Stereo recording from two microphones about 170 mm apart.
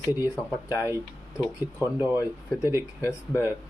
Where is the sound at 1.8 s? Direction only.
15° left (ahead or behind).